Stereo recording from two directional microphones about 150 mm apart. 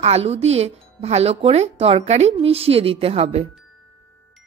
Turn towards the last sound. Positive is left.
turn(degrees=-45)  # may be behind; listen again after turning